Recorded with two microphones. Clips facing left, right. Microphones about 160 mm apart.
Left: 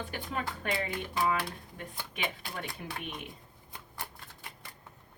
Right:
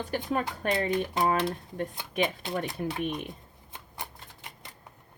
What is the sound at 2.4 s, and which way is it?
Speech, 20° right (ahead or behind).